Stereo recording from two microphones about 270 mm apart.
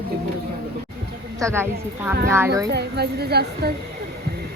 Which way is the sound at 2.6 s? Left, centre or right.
Right.